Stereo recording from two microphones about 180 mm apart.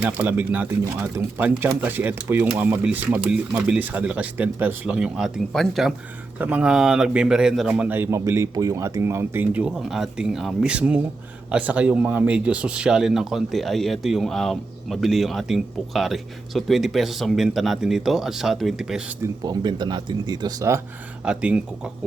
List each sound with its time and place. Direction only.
0.0 s speech: 10° right (ahead or behind)
19.2 s speech: 20° right (ahead or behind)
21.2 s speech: 5° right (ahead or behind)